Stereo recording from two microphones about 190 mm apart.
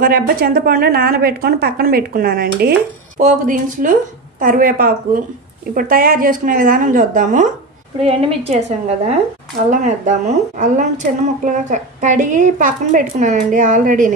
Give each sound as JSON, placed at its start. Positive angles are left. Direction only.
{"t": 0.0, "sound": "a woman's voice", "side_deg": -50}
{"t": 3.2, "sound": "a woman's voice", "side_deg": -40}